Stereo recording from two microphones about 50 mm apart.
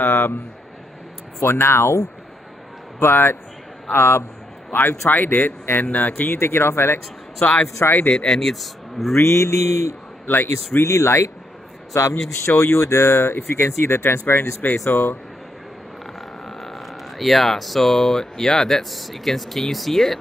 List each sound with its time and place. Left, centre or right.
0.0 s a man's voice: left
1.4 s a man's voice: left
4.7 s speech: left
6.3 s speech: left
7.3 s speech: left
8.3 s speech: centre
9.1 s speech: left
10.2 s a man's voice: left
10.9 s speech: left
13.7 s speech: left
14.9 s a man's voice: left
16.4 s speech: centre